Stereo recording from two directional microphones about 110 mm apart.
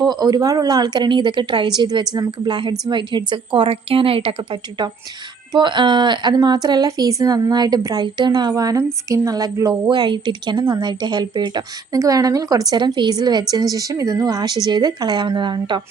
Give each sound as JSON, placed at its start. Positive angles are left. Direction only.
{"t": 0.0, "sound": "a woman's voice", "side_deg": -40}
{"t": 5.5, "sound": "a woman's voice", "side_deg": -45}